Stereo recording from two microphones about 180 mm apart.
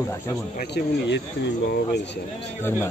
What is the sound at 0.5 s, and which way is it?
Speech, 70° left (ahead or behind).